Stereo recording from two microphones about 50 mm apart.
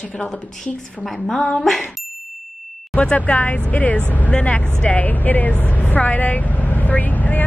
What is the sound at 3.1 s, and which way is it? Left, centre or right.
A woman's voice, left.